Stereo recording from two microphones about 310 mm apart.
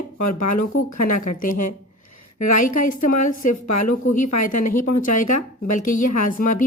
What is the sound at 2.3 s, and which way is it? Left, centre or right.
Speech, left.